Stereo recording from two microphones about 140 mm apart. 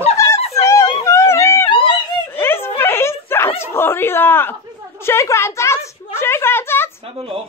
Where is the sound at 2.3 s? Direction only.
15° left (ahead or behind).